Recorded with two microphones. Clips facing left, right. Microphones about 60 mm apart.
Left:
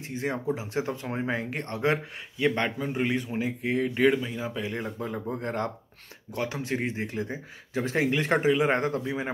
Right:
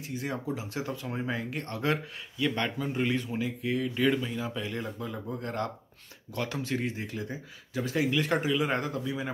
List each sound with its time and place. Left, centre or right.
0.0 s speech: left
4.2 s speech: centre
6.3 s speech: left